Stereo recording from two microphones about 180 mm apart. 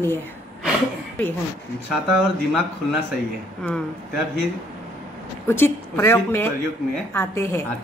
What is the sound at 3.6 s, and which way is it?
Speech, 5° left (ahead or behind).